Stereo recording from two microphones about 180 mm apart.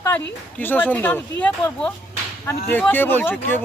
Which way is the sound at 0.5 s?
10° left (ahead or behind).